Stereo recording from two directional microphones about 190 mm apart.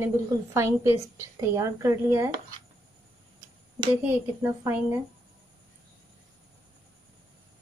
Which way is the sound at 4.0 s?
10° right (ahead or behind).